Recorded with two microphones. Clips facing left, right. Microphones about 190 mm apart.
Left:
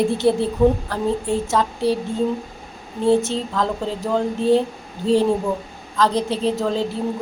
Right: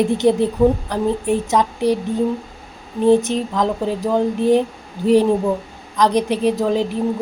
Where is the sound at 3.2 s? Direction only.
15° right (ahead or behind).